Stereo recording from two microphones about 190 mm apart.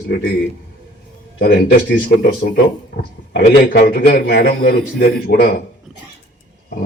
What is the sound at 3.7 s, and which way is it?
A man's voice, 50° left (ahead or behind).